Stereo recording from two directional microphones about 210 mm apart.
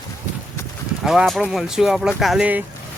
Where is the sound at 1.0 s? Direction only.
Centre (ahead or behind).